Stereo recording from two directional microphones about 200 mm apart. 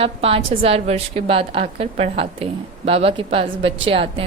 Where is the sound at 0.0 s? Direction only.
30° right (ahead or behind).